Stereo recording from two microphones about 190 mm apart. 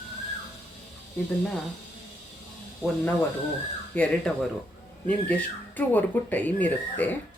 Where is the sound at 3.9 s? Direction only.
5° left (ahead or behind).